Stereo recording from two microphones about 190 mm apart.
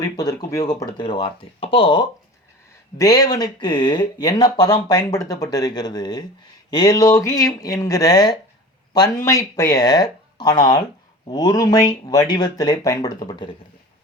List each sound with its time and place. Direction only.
0.0 s speech: 20° left (ahead or behind)